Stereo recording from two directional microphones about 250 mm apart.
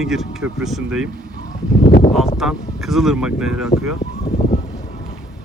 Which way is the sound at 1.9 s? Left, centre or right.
Left.